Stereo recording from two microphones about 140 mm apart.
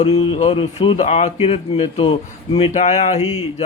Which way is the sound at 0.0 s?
45° left (ahead or behind).